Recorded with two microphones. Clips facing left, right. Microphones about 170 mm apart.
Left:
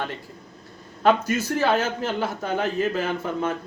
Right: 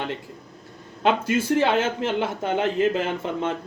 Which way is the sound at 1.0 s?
25° right (ahead or behind).